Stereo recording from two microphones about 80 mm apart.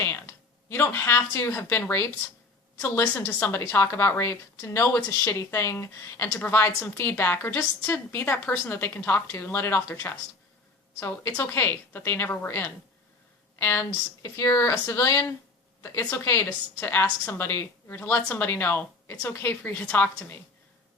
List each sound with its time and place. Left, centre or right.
0.0 s a sound: left
1.3 s a woman's voice: left
16.0 s a woman's voice: left